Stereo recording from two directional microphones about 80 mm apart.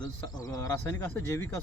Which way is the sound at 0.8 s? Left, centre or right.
Left.